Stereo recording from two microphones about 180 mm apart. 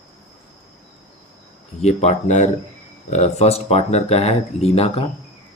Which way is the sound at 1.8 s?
35° left (ahead or behind).